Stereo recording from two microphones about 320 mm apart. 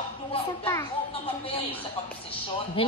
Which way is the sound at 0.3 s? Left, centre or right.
Centre.